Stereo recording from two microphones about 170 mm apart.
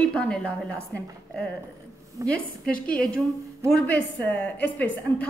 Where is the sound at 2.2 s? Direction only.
20° right (ahead or behind).